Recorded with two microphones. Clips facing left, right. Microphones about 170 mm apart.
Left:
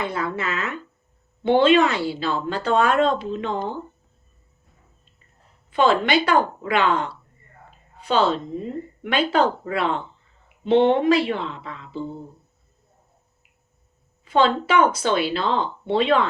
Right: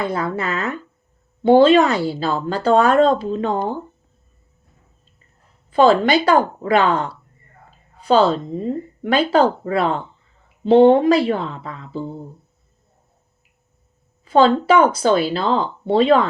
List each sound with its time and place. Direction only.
0.0 s speech: 40° right (ahead or behind)
5.7 s speech: 40° right (ahead or behind)
14.3 s speech: 35° right (ahead or behind)